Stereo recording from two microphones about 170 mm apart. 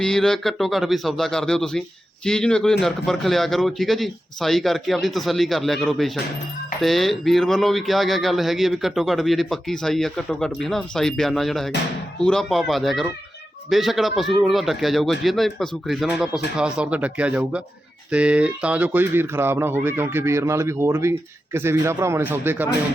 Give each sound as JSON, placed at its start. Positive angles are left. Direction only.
{"t": 0.0, "sound": "speech", "side_deg": 5}